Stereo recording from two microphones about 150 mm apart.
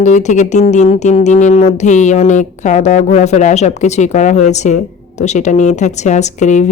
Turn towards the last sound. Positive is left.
turn(degrees=50)  # may be behind; listen again after turning